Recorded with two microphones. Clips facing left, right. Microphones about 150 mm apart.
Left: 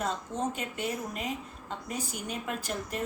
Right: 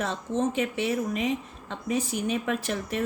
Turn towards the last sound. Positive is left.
turn(degrees=-90)